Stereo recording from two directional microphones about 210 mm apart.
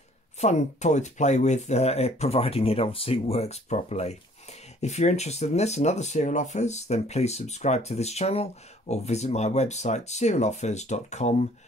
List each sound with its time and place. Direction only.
0.4 s speech: 35° left (ahead or behind)